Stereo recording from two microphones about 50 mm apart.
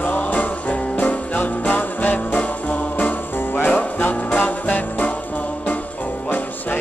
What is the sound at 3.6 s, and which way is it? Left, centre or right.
Music, left.